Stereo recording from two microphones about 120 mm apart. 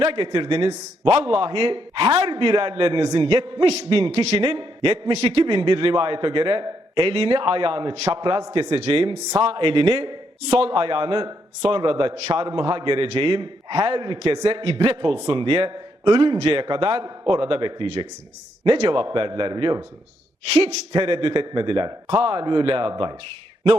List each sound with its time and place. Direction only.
0.0 s a man's voice: 50° right (ahead or behind)
7.9 s a man's voice: 55° right (ahead or behind)
8.2 s a man's voice: 35° right (ahead or behind)
8.7 s a man's voice: 50° right (ahead or behind)
14.8 s a man's voice: 45° right (ahead or behind)
20.5 s a man's voice: 55° right (ahead or behind)
22.9 s a man's voice: 35° right (ahead or behind)